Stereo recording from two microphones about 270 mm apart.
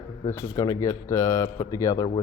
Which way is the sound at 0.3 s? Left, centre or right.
Centre.